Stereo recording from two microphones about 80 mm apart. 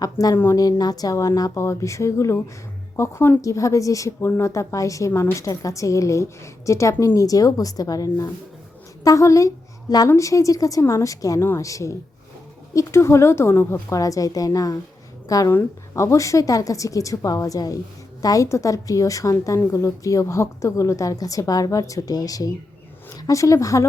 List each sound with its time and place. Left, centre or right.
0.0 s a woman's voice: left
13.9 s a woman's voice: left